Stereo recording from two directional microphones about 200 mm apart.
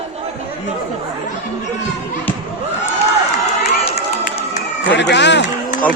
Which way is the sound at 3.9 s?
30° left (ahead or behind).